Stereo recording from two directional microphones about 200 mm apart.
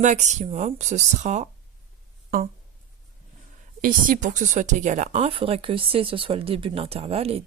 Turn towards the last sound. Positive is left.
turn(degrees=-30)  # may be behind; listen again after turning